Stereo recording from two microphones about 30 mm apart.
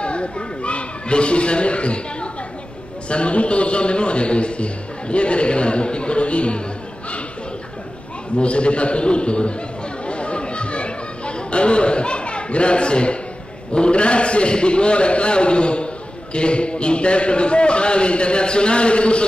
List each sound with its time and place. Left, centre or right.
0.0 s a sound: left
3.1 s a man's voice: left
8.4 s a man's voice: left
10.0 s chatter: left
13.7 s a man's voice: left